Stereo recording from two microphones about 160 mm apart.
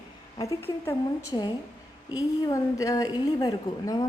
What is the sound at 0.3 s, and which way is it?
A woman's voice, 15° left (ahead or behind).